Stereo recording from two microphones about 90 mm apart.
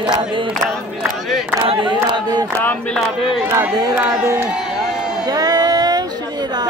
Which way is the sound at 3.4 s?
25° right (ahead or behind).